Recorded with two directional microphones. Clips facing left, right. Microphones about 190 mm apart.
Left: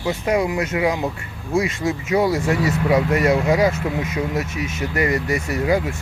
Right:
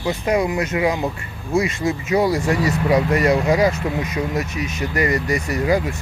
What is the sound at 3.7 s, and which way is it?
Speech, 25° left (ahead or behind).